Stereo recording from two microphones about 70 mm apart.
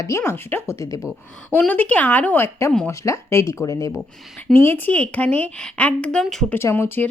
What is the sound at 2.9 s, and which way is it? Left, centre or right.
Speech, left.